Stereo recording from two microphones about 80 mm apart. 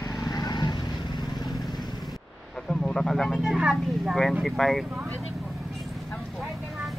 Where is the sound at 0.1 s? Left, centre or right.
Left.